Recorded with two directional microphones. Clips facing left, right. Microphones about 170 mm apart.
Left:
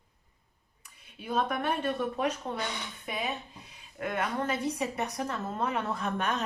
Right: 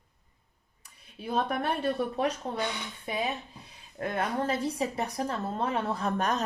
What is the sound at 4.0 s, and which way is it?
Speech, 35° right (ahead or behind).